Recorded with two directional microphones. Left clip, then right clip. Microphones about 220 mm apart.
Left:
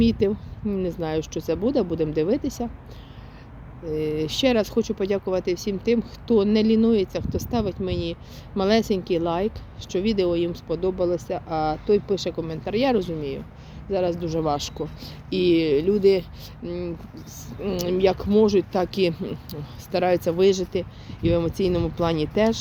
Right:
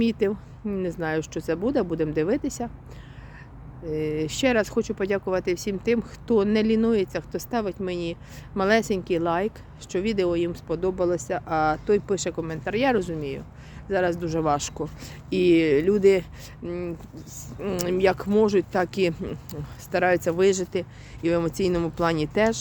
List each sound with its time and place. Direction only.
0.0 s speech: 10° right (ahead or behind)
3.8 s speech: 5° right (ahead or behind)